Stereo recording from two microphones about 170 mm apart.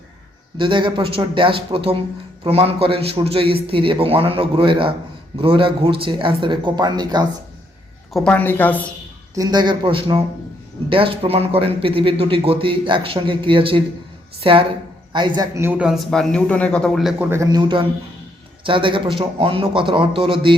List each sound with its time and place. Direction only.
0.5 s a man's voice: 30° right (ahead or behind)
8.1 s a woman's voice: 5° left (ahead or behind)
9.3 s a man's voice: 20° right (ahead or behind)